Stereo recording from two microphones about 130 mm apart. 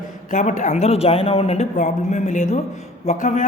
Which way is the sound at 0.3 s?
75° left (ahead or behind).